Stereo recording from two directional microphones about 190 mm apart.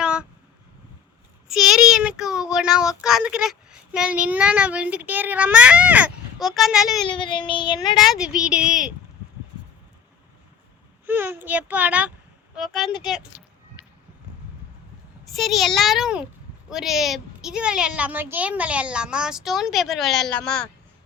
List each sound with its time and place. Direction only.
0.0 s a sound: 5° right (ahead or behind)
1.5 s speech: centre (ahead or behind)
7.1 s child singing: 25° left (ahead or behind)
8.0 s a child's voice: 5° right (ahead or behind)
11.0 s a child's voice: 10° right (ahead or behind)
15.3 s a child's voice: centre (ahead or behind)